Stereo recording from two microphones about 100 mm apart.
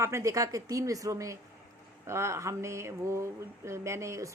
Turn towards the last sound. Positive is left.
turn(degrees=-30)  # may be behind; listen again after turning